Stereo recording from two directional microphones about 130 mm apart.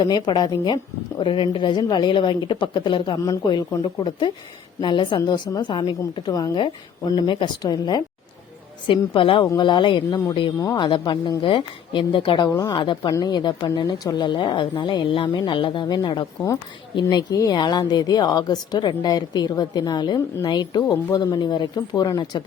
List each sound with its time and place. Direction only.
0.1 s a woman's voice: 35° left (ahead or behind)
6.6 s a woman's voice: 40° left (ahead or behind)